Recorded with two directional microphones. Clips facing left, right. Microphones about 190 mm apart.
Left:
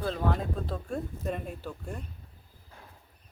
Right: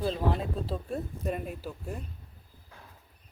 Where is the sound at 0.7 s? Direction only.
5° right (ahead or behind).